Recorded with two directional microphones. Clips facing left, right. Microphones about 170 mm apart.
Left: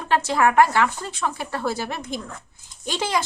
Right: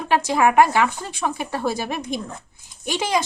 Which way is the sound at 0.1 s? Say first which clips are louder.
Right 1 dB; 15° right (ahead or behind).